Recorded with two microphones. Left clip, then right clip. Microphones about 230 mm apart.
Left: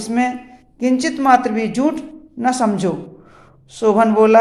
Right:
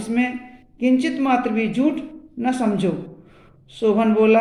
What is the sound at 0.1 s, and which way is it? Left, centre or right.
Speech, centre.